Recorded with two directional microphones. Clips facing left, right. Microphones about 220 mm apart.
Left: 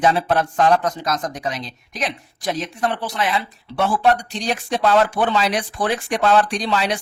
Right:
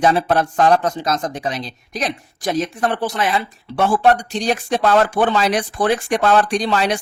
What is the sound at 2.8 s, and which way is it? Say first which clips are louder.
Speech: right 3 dB; 50° right (ahead or behind).